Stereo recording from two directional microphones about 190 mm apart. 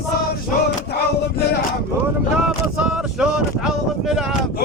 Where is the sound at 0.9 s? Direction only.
60° left (ahead or behind).